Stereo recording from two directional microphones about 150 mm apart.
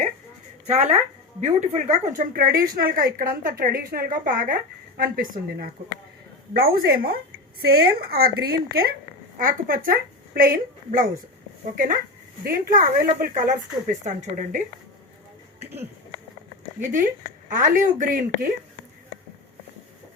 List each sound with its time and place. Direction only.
0.7 s speech: 45° right (ahead or behind); by 5.7 s 70° right (ahead or behind)
6.5 s speech: 85° right
9.4 s a woman's voice: 70° right (ahead or behind)
12.5 s a woman's voice: 70° right (ahead or behind); by 14.6 s 55° right (ahead or behind)
16.8 s a woman's voice: 55° right (ahead or behind)